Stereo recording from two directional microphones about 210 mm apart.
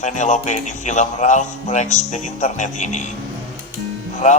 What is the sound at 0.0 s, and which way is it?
Speech, 35° left (ahead or behind).